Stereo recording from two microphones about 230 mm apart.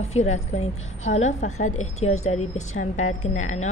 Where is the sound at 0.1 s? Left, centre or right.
Left.